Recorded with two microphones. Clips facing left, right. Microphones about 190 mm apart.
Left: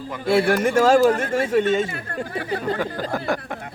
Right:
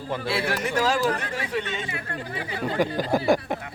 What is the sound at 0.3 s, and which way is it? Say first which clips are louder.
Speech: left 10 dB; 50° left (ahead or behind).